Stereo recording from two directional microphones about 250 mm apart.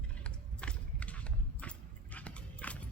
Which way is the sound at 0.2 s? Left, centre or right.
Centre.